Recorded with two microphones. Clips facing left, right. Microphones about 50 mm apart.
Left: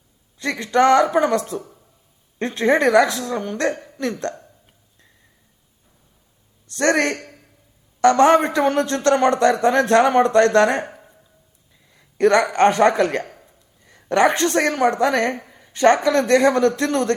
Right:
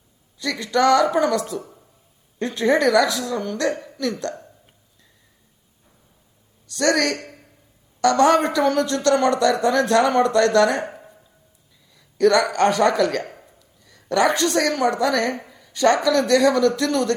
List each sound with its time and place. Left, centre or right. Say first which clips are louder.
0.3 s a woman's voice: left 3 dB; left
6.7 s a woman's voice: left 1 dB; left
11.9 s a woman's voice: left 1 dB; left
15.5 s a sound: left 3 dB; left
16.0 s a woman's voice: left 1 dB; left